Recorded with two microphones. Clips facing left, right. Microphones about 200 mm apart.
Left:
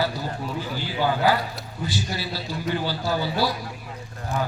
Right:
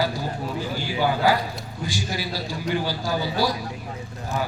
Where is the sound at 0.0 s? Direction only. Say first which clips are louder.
Right 1 dB; 15° right (ahead or behind).